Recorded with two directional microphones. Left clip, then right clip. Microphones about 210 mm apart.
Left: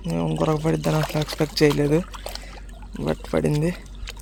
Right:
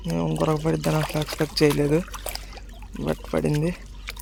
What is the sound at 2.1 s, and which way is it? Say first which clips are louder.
Trickle: right 1 dB; 20° right (ahead or behind).